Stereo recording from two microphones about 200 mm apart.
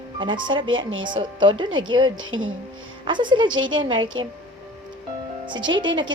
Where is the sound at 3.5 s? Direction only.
80° right.